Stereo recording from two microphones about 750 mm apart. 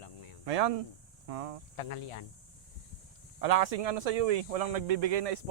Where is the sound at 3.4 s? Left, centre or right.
Right.